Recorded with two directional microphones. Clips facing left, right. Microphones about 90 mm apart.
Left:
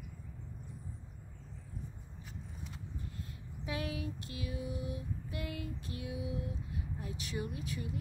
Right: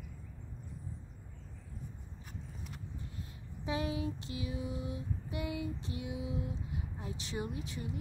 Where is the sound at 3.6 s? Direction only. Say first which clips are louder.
Right 4 dB; 25° right (ahead or behind).